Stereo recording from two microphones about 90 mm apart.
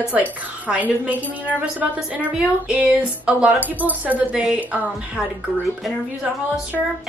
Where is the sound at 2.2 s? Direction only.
15° right (ahead or behind).